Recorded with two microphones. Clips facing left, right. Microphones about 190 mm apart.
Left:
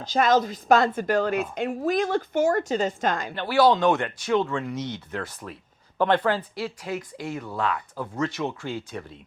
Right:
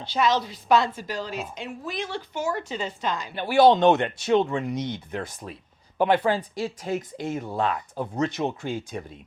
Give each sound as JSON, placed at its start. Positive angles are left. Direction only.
{"t": 0.0, "sound": "a woman's voice", "side_deg": 45}
{"t": 3.3, "sound": "speech", "side_deg": -15}
{"t": 6.8, "sound": "speech", "side_deg": -25}